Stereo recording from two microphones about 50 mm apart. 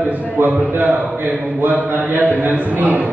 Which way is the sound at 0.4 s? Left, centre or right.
Right.